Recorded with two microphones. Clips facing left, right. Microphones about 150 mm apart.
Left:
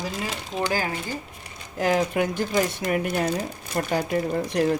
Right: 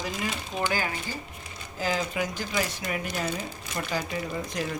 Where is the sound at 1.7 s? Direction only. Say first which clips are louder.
Left 7 dB; 60° left (ahead or behind).